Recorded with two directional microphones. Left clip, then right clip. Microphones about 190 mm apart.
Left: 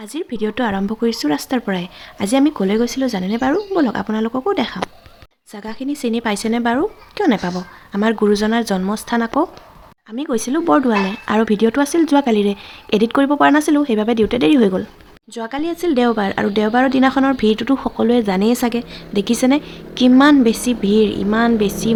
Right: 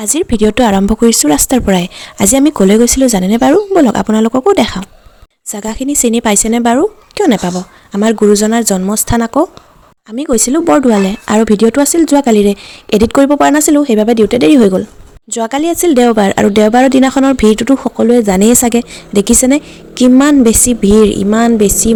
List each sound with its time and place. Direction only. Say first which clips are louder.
0.0 s speech: right 11 dB; 50° right (ahead or behind); by 14.8 s 30° right (ahead or behind)
15.3 s speech: right 10 dB; 45° right (ahead or behind)
18.5 s speech: right 8 dB; 45° right (ahead or behind)